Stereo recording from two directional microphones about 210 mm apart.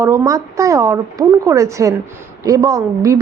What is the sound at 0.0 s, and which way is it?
A woman's voice, 15° right (ahead or behind).